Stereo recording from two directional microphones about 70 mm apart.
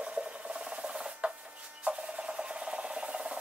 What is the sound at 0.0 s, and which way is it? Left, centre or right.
Rub, centre.